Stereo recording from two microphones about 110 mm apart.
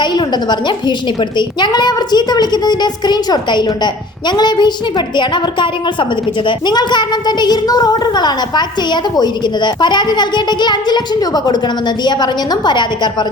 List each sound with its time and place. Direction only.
0.0 s a woman's voice: 45° left (ahead or behind)